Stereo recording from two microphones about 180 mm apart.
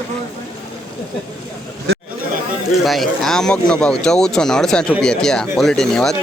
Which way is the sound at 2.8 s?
Centre (ahead or behind).